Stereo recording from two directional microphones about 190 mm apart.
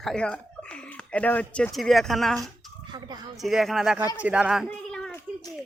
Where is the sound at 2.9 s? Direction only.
20° right (ahead or behind).